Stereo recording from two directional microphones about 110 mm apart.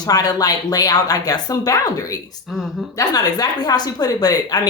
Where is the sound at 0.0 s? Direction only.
35° left (ahead or behind).